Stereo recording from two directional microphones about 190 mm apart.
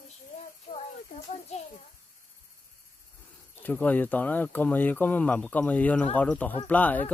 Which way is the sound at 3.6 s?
10° left (ahead or behind).